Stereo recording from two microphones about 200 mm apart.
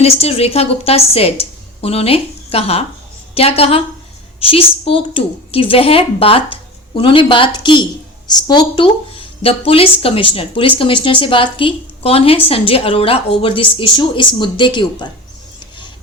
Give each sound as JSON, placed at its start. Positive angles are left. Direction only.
{"t": 0.0, "sound": "a woman's voice", "side_deg": 30}